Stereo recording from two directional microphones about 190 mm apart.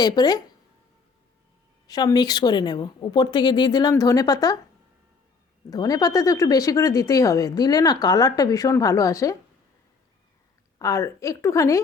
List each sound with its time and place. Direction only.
0.0 s speech: 20° left (ahead or behind)
1.9 s speech: 20° left (ahead or behind)
5.7 s speech: 20° left (ahead or behind)
10.8 s speech: 15° left (ahead or behind)